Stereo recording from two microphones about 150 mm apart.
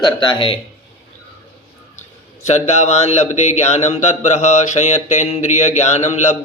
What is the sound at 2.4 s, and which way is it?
Speech, 50° left (ahead or behind).